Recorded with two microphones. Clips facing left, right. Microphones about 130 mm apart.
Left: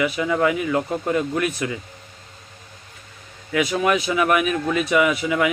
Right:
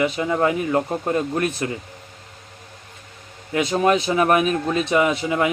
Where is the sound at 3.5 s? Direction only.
30° right (ahead or behind).